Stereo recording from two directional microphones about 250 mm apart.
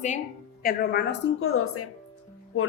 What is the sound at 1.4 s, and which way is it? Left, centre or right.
Speech, left.